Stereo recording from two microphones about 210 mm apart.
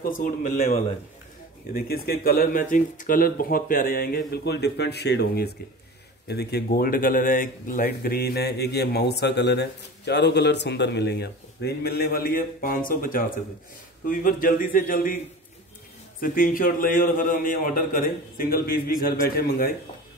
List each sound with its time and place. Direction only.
0.2 s speech: 35° left (ahead or behind)
16.2 s speech: 40° left (ahead or behind)